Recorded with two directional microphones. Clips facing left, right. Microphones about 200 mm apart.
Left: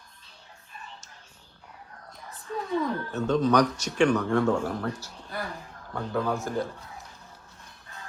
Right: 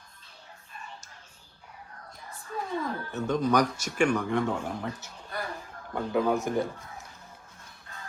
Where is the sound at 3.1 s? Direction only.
15° right (ahead or behind).